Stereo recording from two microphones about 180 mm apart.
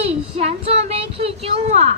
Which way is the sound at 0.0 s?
35° right (ahead or behind).